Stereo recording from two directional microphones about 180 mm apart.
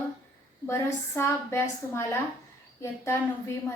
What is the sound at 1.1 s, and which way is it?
A woman's voice, 15° left (ahead or behind).